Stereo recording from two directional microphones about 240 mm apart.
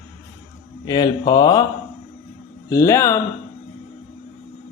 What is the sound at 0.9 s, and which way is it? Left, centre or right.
Speech, centre.